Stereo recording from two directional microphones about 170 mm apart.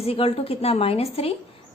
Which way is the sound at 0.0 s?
35° left (ahead or behind).